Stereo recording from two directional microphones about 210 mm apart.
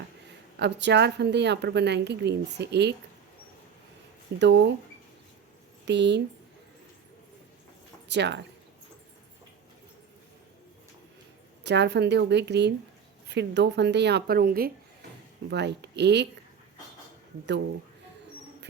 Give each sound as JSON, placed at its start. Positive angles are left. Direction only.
{"t": 0.6, "sound": "a woman's voice", "side_deg": -55}
{"t": 4.4, "sound": "a woman's voice", "side_deg": -55}
{"t": 5.8, "sound": "speech", "side_deg": -55}
{"t": 8.0, "sound": "speech", "side_deg": -55}
{"t": 11.6, "sound": "a woman's voice", "side_deg": -55}